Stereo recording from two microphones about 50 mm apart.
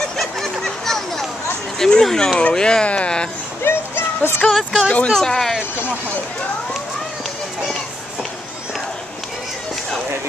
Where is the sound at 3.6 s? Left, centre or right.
Left.